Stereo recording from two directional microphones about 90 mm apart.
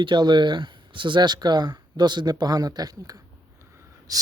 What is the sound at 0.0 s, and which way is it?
A man's voice, 55° right (ahead or behind).